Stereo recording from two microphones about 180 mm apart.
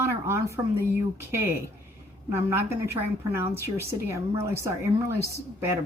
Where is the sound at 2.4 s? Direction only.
15° right (ahead or behind).